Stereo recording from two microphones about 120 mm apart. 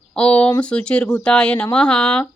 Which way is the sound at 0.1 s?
10° left (ahead or behind).